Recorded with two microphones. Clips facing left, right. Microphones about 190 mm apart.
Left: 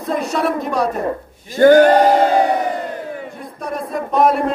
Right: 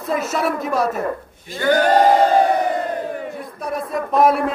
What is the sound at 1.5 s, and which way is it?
Speech, 45° left (ahead or behind).